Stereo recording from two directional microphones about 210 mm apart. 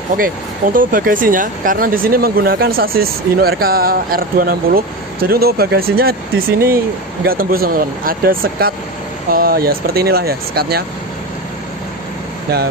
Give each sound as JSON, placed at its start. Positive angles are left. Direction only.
{"t": 0.7, "sound": "speech", "side_deg": -40}